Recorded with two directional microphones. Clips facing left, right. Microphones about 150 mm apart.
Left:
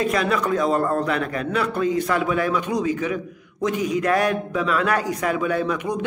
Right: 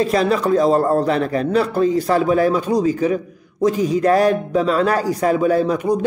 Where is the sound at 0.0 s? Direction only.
30° right (ahead or behind).